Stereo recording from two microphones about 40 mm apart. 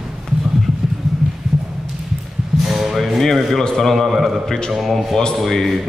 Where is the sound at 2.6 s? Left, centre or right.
Centre.